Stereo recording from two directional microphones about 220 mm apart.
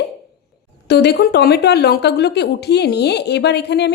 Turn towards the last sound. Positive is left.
turn(degrees=50)  # may be behind; listen again after turning